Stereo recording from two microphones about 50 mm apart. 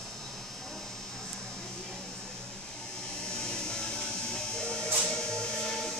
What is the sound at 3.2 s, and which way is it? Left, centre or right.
Music, centre.